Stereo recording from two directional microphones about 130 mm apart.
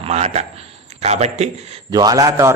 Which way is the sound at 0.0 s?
55° right (ahead or behind).